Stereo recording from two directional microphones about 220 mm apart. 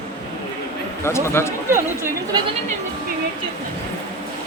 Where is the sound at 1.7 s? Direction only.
10° right (ahead or behind).